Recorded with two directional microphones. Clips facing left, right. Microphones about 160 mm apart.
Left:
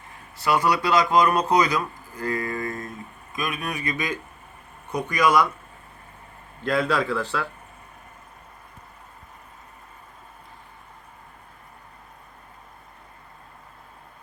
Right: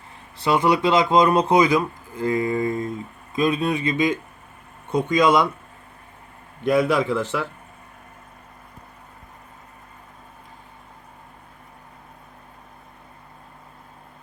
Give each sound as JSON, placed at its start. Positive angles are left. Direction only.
{"t": 0.4, "sound": "speech", "side_deg": -20}
{"t": 6.6, "sound": "speech", "side_deg": -15}